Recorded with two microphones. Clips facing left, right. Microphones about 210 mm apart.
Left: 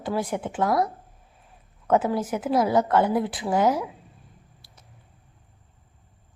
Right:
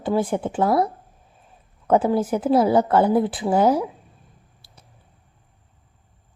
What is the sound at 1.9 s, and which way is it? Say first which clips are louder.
A woman's voice: right 4 dB; 30° right (ahead or behind).